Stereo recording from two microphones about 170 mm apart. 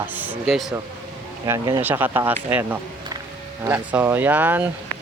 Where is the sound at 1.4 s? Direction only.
20° right (ahead or behind).